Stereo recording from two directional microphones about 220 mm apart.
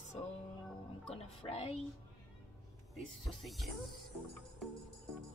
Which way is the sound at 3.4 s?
Centre (ahead or behind).